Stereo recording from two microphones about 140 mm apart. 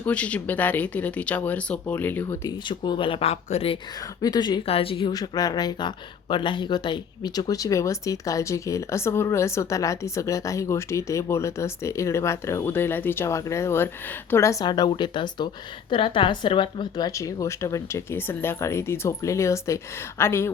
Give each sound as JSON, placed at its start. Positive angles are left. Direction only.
{"t": 0.0, "sound": "speech", "side_deg": 10}
{"t": 2.6, "sound": "speech", "side_deg": 35}
{"t": 4.2, "sound": "speech", "side_deg": 30}
{"t": 4.6, "sound": "speech", "side_deg": 45}
{"t": 5.1, "sound": "speech", "side_deg": 25}
{"t": 14.6, "sound": "speech", "side_deg": 30}